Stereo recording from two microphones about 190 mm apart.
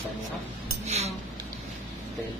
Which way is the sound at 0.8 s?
35° right (ahead or behind).